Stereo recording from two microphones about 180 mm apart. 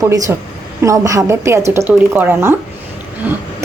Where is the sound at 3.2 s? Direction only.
10° right (ahead or behind).